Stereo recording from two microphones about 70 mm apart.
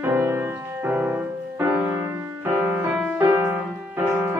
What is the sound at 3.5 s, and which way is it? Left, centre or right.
Music, right.